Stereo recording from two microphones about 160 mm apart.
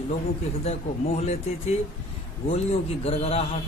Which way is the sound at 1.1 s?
40° left (ahead or behind).